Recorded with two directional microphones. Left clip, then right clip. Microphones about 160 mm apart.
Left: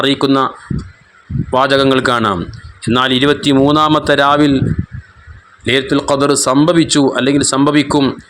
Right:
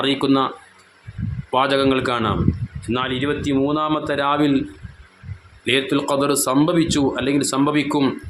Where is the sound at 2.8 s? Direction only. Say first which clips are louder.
Left 10 dB; 55° left (ahead or behind); by 4.6 s 40° left (ahead or behind).